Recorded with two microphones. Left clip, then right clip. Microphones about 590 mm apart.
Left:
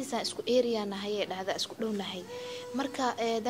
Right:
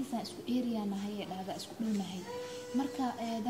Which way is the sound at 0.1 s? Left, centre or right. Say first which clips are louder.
Left 9 dB; left.